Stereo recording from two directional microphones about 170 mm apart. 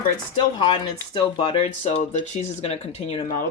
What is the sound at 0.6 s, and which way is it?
Speech, 30° left (ahead or behind).